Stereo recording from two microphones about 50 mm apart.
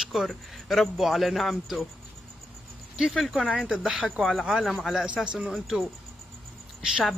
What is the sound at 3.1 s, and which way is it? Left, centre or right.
A man's voice, centre.